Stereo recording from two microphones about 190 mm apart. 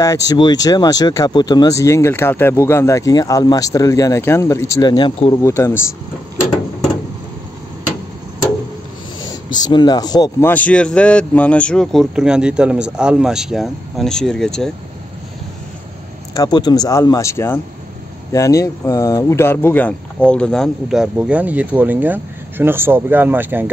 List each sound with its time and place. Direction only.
0.0 s speech: 20° left (ahead or behind)
9.6 s speech: 20° left (ahead or behind)
10.5 s speech: 5° left (ahead or behind)
16.3 s speech: 20° left (ahead or behind); by 23.7 s 10° right (ahead or behind)